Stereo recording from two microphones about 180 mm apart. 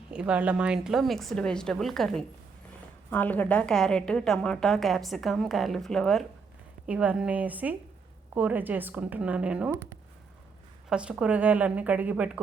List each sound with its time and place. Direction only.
0.1 s a woman's voice: 5° right (ahead or behind)
10.8 s a woman's voice: 5° right (ahead or behind)